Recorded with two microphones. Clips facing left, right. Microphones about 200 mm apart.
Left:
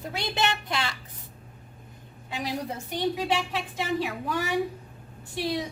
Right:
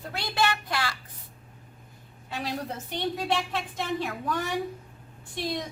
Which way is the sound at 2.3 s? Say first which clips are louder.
Left 1 dB; 15° left (ahead or behind).